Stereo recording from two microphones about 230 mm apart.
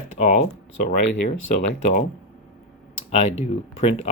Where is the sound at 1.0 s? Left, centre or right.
Left.